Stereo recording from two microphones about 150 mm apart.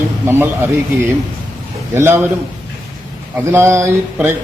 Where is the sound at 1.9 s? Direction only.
15° right (ahead or behind).